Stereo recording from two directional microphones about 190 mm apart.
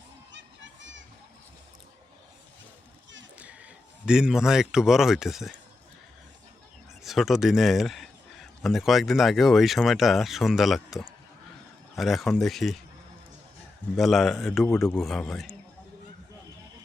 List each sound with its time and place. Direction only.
0.3 s children playing: 70° right (ahead or behind)
3.3 s a man's voice: 5° right (ahead or behind)
7.0 s a man's voice: centre (ahead or behind)
13.9 s a man's voice: centre (ahead or behind)